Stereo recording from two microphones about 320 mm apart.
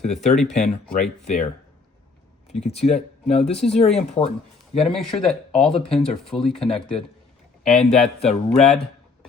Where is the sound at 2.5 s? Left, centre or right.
Centre.